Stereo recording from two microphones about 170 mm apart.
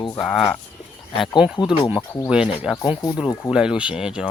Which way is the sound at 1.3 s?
5° right (ahead or behind).